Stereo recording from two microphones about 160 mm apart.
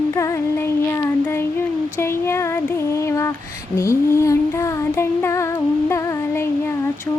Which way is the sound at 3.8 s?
15° left (ahead or behind).